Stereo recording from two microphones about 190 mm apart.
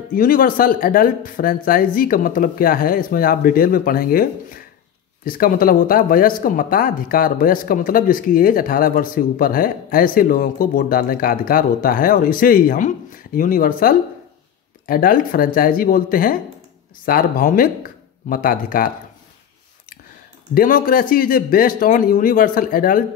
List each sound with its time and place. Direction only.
0.1 s speech: 50° left (ahead or behind)
20.5 s speech: 50° left (ahead or behind)